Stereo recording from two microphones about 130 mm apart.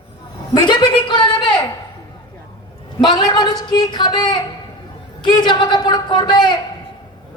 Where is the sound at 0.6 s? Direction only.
35° left (ahead or behind).